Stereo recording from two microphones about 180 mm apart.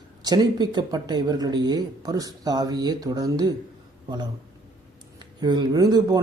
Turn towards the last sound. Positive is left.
turn(degrees=-20)  # may be behind; listen again after turning